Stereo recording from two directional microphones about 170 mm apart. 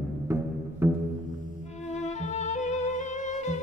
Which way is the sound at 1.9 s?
40° left (ahead or behind).